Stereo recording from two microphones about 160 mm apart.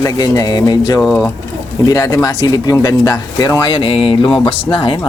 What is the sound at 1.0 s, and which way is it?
Speech, centre (ahead or behind).